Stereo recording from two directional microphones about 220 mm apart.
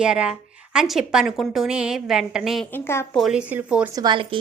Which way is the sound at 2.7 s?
10° left (ahead or behind).